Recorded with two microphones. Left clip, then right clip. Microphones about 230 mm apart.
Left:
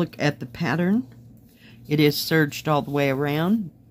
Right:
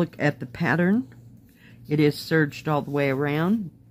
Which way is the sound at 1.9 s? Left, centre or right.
Centre.